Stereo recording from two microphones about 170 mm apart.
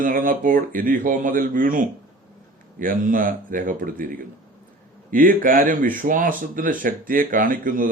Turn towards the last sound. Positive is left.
turn(degrees=-55)  # may be behind; listen again after turning